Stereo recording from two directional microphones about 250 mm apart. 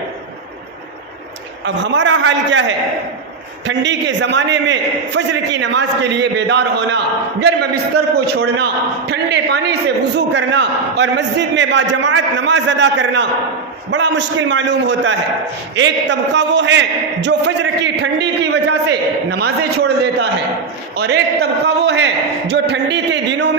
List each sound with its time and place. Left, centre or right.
1.6 s a man's voice: right
20.9 s a man's voice: right